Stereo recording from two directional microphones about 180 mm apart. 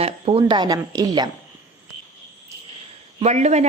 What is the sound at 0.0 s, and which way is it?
A woman's voice, 30° right (ahead or behind).